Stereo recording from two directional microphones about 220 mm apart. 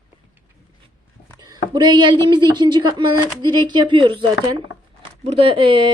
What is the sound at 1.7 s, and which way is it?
A woman's voice, 20° right (ahead or behind).